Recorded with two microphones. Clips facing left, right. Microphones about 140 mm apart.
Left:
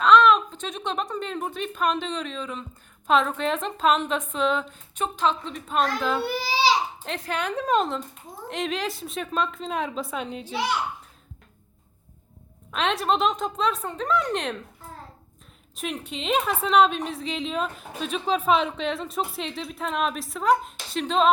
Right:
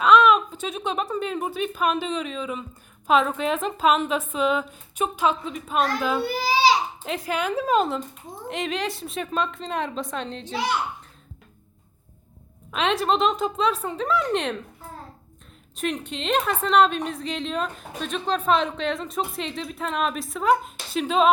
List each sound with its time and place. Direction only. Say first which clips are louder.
0.0 s a woman's voice: even; 10° right (ahead or behind)
6.2 s a sound: right 3 dB; 45° right (ahead or behind)
7.0 s a woman's voice: right 3 dB; 5° right (ahead or behind)
12.7 s a woman's voice: right 2 dB; centre (ahead or behind)
15.7 s a woman's voice: right 4 dB; centre (ahead or behind)